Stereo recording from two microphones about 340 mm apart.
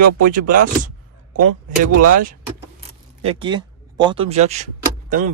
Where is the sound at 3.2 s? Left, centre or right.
Centre.